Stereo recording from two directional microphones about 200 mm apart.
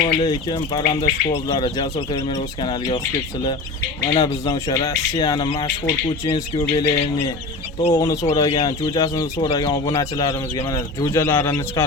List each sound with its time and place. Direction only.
0.0 s speech: 20° left (ahead or behind)
4.1 s speech: 20° left (ahead or behind)